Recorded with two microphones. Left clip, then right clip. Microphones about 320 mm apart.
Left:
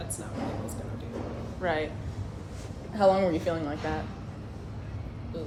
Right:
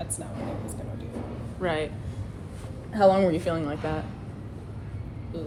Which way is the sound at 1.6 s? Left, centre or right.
Right.